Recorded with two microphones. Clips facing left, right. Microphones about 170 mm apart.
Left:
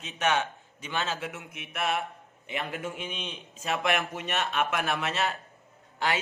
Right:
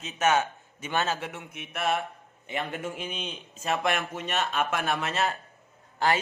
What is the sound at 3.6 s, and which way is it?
Speech, 40° right (ahead or behind).